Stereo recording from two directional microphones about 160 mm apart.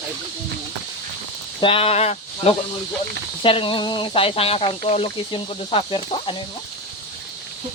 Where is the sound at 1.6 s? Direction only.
35° left (ahead or behind).